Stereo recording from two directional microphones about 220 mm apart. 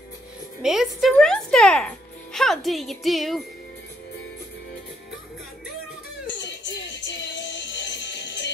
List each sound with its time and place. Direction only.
0.6 s speech: centre (ahead or behind)
6.2 s music: 55° left (ahead or behind)